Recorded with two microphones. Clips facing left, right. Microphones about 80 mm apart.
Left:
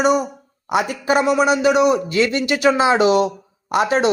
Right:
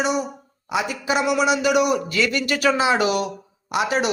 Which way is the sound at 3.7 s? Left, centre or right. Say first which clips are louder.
Left 5 dB; left.